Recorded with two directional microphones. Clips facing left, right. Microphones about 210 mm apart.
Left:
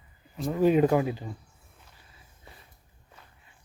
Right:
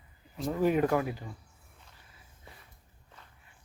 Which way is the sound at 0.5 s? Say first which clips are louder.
Left 5 dB; 20° left (ahead or behind).